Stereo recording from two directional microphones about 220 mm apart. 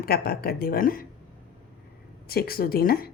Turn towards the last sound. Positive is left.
turn(degrees=45)  # may be behind; listen again after turning